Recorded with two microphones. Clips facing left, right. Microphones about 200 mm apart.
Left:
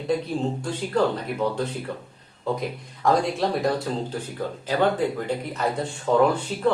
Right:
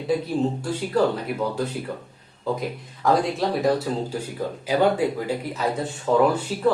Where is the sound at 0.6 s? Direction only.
5° right (ahead or behind).